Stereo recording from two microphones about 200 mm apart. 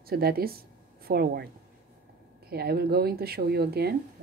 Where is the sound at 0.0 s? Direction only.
50° right (ahead or behind).